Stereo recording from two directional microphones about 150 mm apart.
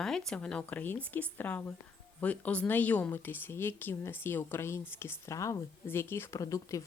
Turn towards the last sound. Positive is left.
turn(degrees=20)  # may be behind; listen again after turning